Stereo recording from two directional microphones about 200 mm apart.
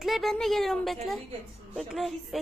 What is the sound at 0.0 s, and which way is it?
A woman's voice, centre (ahead or behind).